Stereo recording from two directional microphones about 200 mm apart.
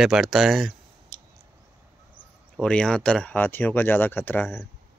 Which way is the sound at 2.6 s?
5° left (ahead or behind).